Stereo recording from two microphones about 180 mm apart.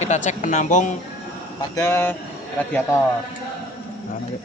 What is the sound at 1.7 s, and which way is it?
Speech, 15° left (ahead or behind).